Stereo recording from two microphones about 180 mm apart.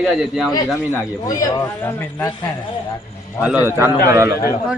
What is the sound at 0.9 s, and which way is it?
Speech, 20° left (ahead or behind).